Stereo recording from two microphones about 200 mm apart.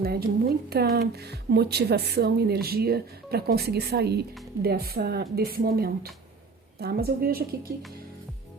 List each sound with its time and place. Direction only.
0.0 s speech: 50° right (ahead or behind)